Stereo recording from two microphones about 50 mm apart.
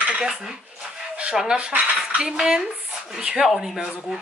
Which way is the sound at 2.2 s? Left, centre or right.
Centre.